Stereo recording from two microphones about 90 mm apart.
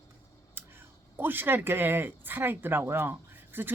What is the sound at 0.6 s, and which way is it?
Clicking, 25° right (ahead or behind).